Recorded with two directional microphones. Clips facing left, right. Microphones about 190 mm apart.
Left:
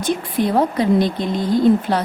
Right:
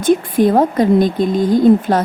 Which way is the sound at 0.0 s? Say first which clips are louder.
Right 7 dB; 50° right (ahead or behind).